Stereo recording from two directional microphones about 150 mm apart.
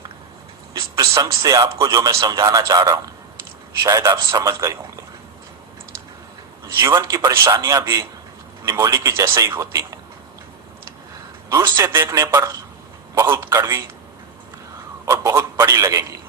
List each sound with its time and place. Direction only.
0.7 s a man's voice: 25° right (ahead or behind)
6.7 s a man's voice: 20° right (ahead or behind)
11.4 s a man's voice: 20° right (ahead or behind)
15.0 s a man's voice: 15° right (ahead or behind)